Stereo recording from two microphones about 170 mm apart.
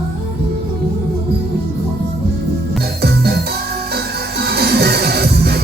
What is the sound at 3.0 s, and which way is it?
Music, 70° right (ahead or behind).